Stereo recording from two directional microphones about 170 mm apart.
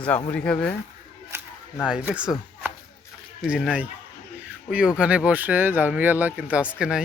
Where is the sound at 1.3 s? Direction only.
15° right (ahead or behind).